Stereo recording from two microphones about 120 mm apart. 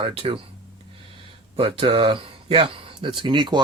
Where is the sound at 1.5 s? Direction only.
50° right (ahead or behind).